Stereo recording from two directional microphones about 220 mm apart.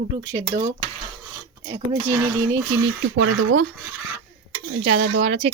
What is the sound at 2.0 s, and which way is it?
Speech, 10° right (ahead or behind).